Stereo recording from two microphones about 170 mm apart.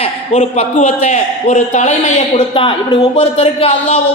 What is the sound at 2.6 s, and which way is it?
Speech, 30° left (ahead or behind).